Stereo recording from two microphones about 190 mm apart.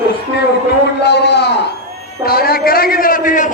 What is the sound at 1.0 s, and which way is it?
A man's voice, 60° left (ahead or behind).